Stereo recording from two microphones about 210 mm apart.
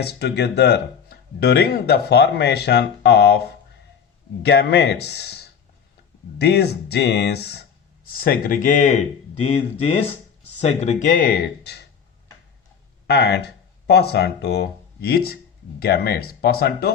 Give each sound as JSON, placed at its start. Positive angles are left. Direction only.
{"t": 0.0, "sound": "speech", "side_deg": 55}
{"t": 4.4, "sound": "speech", "side_deg": 50}
{"t": 13.1, "sound": "speech", "side_deg": 55}